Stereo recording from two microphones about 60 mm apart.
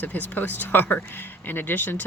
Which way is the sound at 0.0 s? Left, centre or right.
Left.